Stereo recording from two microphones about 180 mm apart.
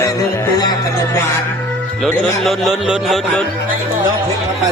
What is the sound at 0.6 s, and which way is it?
Music, 25° left (ahead or behind).